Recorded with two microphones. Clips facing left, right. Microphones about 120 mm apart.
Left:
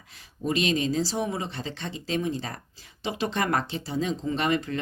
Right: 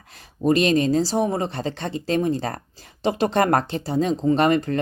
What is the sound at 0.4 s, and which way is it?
Speech, 50° right (ahead or behind).